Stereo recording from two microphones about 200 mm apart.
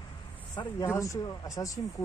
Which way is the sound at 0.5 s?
15° left (ahead or behind).